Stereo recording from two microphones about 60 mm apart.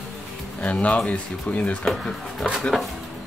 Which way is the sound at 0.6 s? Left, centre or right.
Left.